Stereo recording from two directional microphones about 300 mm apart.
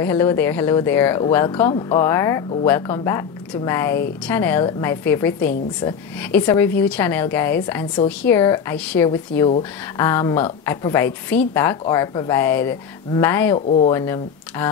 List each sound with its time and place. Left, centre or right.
0.0 s speech: centre
13.7 s speech: left
13.9 s speech: centre